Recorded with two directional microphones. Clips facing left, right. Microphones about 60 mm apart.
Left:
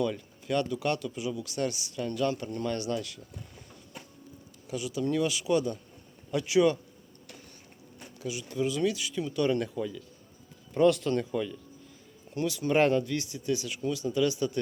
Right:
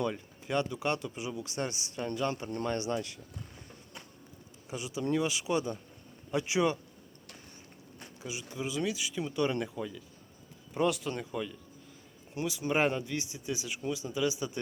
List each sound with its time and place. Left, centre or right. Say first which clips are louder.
0.0 s speech: left 3 dB; right
4.6 s speech: left 4 dB; right
8.2 s speech: left 7 dB; right
12.3 s speech: left 4 dB; centre